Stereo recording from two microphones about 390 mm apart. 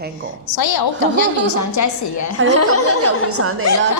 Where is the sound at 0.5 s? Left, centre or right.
Left.